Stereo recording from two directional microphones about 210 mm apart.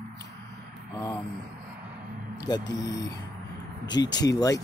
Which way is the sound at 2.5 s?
20° left (ahead or behind).